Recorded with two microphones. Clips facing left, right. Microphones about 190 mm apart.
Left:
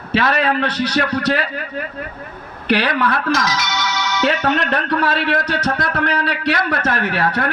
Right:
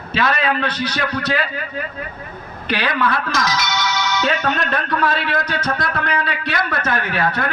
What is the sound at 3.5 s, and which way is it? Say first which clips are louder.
Music: right 1 dB; 40° right (ahead or behind).